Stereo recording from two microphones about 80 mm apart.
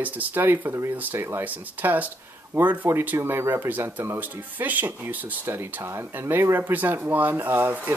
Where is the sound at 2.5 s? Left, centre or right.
Right.